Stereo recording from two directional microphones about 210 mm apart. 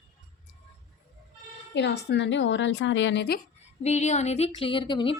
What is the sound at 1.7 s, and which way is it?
A woman's voice, 55° left (ahead or behind).